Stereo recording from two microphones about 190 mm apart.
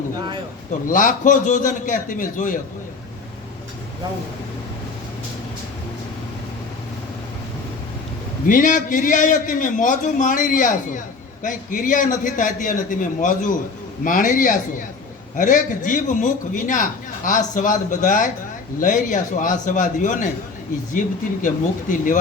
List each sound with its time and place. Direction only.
0.9 s a man's voice: 45° left (ahead or behind)
8.4 s a man's voice: 45° left (ahead or behind)